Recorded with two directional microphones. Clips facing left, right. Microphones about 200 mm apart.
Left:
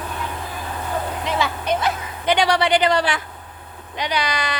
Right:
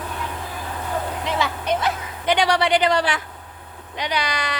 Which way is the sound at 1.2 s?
10° left (ahead or behind).